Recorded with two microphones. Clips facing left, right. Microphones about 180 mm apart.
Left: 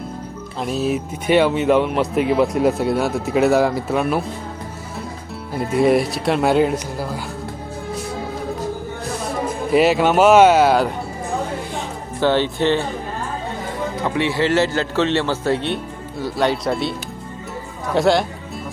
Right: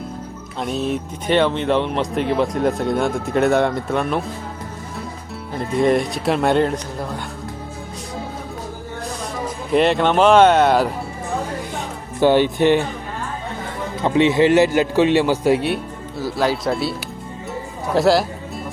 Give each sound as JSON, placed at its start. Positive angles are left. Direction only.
{"t": 0.6, "sound": "speech", "side_deg": 5}
{"t": 5.5, "sound": "speech", "side_deg": 5}
{"t": 9.7, "sound": "speech", "side_deg": 5}
{"t": 12.2, "sound": "a man's voice", "side_deg": -15}
{"t": 14.0, "sound": "a man's voice", "side_deg": -20}